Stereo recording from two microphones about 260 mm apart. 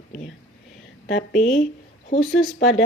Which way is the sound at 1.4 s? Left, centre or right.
Centre.